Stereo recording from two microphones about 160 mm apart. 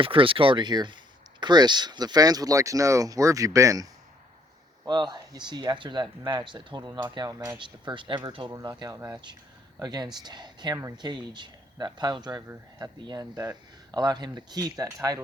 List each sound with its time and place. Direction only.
0.0 s speech: 35° right (ahead or behind)
4.9 s speech: 25° right (ahead or behind)